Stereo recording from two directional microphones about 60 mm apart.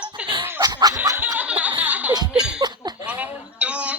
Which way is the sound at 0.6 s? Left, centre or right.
Right.